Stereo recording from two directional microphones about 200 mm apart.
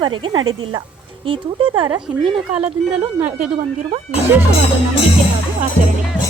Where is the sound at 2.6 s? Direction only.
10° right (ahead or behind).